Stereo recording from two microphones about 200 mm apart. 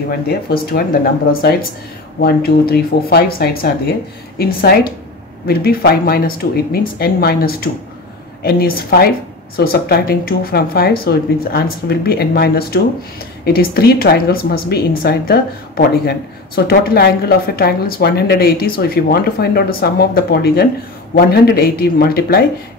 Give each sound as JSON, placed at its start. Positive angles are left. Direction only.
{"t": 0.3, "sound": "a woman's voice", "side_deg": 50}
{"t": 2.7, "sound": "a woman's voice", "side_deg": 50}